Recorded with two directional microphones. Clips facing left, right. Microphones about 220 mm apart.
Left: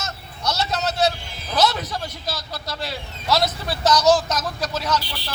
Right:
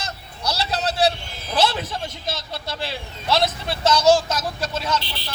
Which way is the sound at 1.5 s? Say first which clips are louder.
Even; 30° right (ahead or behind).